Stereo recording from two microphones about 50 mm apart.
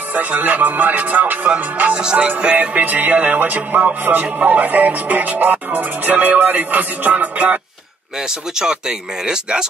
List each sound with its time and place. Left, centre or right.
0.1 s music: right
2.0 s music: right
8.2 s speech: centre